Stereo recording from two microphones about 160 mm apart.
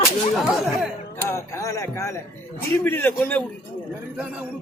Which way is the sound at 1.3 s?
15° left (ahead or behind).